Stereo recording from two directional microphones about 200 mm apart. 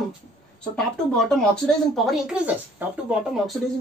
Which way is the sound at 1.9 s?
5° right (ahead or behind).